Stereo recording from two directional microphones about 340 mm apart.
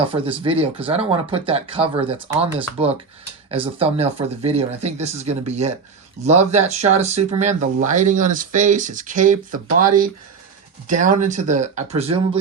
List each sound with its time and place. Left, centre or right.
0.0 s speech: centre